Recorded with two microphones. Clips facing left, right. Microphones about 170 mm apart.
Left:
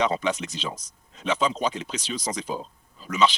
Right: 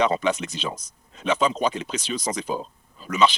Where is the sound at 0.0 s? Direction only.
55° right (ahead or behind).